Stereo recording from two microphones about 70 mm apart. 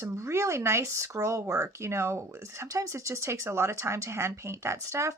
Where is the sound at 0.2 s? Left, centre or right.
Right.